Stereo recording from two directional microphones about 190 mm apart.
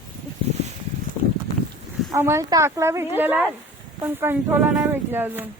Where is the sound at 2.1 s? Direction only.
15° right (ahead or behind).